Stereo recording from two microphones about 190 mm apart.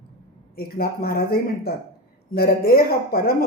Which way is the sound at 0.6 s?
50° left (ahead or behind).